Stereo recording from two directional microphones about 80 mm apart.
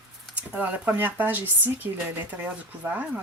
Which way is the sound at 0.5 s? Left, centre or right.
Right.